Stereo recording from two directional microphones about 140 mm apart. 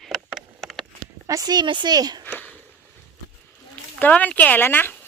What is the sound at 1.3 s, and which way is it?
Speech, 25° right (ahead or behind).